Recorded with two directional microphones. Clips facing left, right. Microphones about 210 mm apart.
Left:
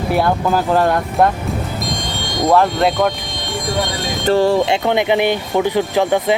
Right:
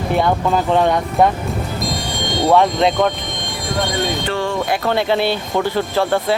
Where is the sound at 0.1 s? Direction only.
5° left (ahead or behind).